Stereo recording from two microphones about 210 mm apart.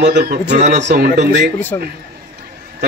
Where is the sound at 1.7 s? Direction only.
15° left (ahead or behind).